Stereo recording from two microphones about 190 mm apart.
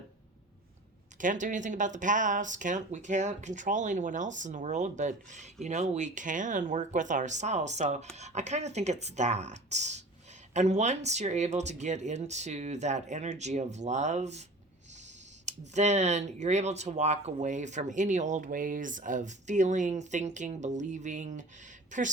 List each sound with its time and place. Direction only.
1.2 s speech: 40° right (ahead or behind)
15.4 s speech: 35° right (ahead or behind)